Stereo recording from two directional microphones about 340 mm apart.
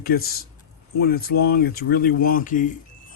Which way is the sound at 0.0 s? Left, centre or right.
Left.